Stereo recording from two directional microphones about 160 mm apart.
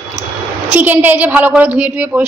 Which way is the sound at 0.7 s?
10° right (ahead or behind).